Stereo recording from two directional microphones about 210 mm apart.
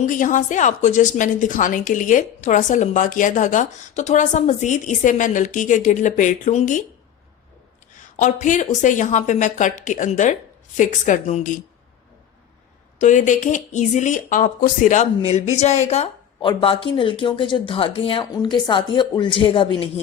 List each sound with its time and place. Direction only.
0.0 s a woman's voice: 35° left (ahead or behind)
8.1 s a woman's voice: 35° left (ahead or behind)
13.0 s speech: 35° left (ahead or behind)